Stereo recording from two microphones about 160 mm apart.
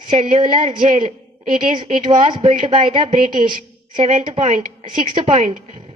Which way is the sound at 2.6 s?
30° right (ahead or behind).